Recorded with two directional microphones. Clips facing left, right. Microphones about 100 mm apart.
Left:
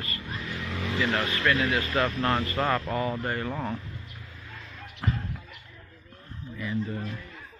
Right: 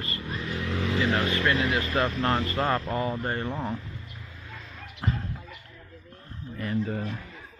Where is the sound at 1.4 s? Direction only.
30° right (ahead or behind).